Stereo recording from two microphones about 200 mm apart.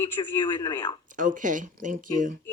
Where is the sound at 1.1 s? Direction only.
40° right (ahead or behind).